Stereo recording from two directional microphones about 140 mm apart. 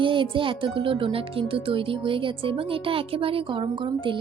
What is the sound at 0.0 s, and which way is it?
Speech, 35° right (ahead or behind).